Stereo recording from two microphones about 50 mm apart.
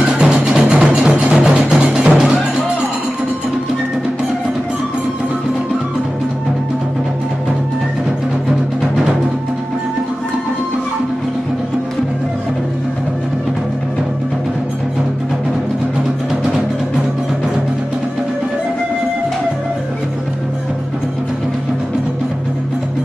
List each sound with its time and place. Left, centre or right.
0.0 s music: centre